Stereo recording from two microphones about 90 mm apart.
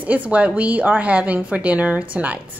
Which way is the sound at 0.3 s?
15° right (ahead or behind).